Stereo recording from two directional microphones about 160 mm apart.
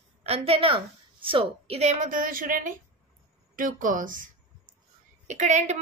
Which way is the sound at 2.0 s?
60° right (ahead or behind).